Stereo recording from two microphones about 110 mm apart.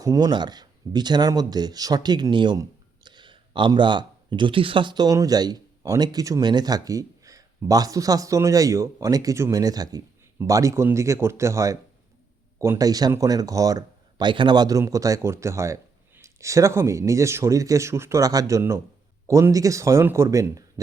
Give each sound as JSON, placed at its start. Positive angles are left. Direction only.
{"t": 0.0, "sound": "speech", "side_deg": -35}
{"t": 2.6, "sound": "a sound", "side_deg": -45}
{"t": 3.8, "sound": "speech", "side_deg": -45}